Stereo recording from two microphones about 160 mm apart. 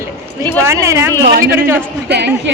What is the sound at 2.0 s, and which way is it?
Speech, 90° right.